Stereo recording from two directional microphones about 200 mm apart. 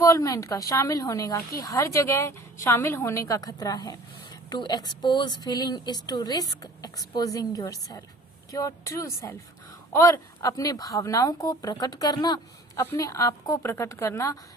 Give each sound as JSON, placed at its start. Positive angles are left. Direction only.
{"t": 0.0, "sound": "a woman's voice", "side_deg": 15}